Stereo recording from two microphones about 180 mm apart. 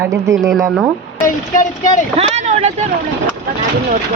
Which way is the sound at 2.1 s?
40° right (ahead or behind).